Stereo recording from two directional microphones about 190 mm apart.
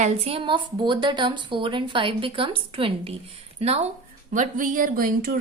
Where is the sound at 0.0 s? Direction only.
30° right (ahead or behind).